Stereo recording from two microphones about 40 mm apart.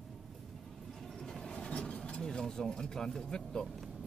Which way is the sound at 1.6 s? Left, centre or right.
Left.